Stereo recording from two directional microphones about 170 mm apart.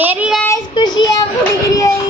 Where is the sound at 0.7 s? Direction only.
25° left (ahead or behind).